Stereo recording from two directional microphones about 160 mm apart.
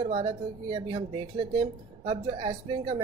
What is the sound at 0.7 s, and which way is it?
Speech, 35° right (ahead or behind).